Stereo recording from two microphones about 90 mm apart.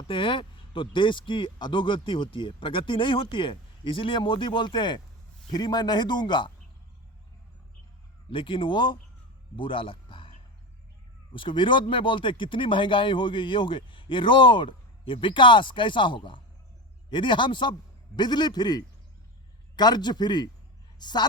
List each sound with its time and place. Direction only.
0.1 s a man's voice: 70° left (ahead or behind)
8.3 s speech: 70° left (ahead or behind)
9.6 s a sound: 70° left (ahead or behind)
11.3 s a man's voice: 70° left (ahead or behind); by 21.2 s 50° left (ahead or behind)